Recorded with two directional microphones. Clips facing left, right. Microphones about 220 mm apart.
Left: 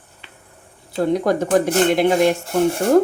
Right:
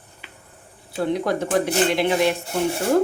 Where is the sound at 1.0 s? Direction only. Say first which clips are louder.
Left 4 dB; 45° left (ahead or behind).